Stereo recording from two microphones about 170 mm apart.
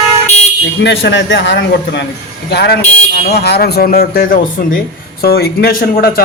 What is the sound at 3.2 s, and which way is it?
Speech, 70° left (ahead or behind).